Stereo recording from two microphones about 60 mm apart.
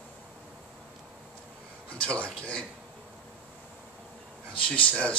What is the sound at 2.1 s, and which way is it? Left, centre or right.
Speech, centre.